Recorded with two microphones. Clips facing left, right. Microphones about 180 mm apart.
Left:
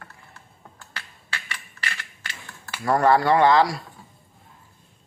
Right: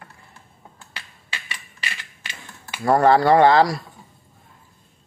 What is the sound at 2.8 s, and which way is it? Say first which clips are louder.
Speech: right 3 dB; 30° right (ahead or behind).